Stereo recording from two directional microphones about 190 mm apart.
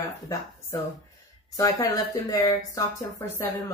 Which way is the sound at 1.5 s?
20° left (ahead or behind).